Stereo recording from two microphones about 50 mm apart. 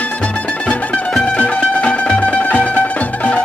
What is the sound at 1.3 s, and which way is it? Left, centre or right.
Music, left.